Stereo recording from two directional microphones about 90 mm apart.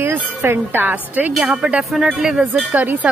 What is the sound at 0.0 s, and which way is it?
Speech, 25° right (ahead or behind).